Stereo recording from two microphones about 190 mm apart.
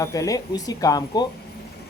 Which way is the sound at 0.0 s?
15° left (ahead or behind).